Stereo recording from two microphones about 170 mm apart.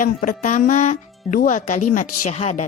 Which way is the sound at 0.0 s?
50° left (ahead or behind).